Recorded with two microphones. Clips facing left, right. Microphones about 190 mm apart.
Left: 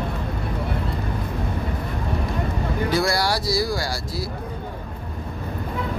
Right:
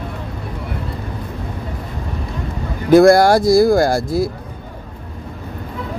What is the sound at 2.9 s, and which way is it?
Speech, 50° right (ahead or behind).